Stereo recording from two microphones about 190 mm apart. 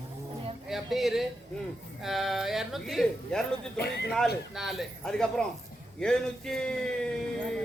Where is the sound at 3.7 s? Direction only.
60° left (ahead or behind).